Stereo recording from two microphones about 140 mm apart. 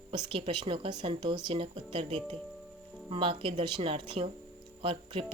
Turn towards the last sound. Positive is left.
turn(degrees=-40)  # may be behind; listen again after turning